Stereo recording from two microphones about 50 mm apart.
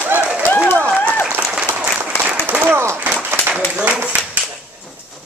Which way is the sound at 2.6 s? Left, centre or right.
Right.